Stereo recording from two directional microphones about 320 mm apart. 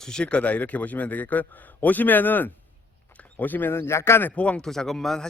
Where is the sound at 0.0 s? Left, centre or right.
Centre.